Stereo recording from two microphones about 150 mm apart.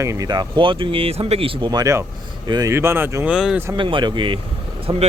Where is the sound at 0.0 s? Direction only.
20° right (ahead or behind).